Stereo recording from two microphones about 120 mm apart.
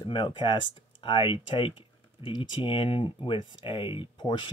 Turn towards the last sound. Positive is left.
turn(degrees=40)  # may be behind; listen again after turning